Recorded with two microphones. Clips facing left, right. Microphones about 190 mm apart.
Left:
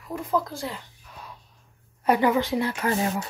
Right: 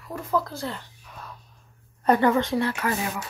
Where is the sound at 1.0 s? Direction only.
10° left (ahead or behind).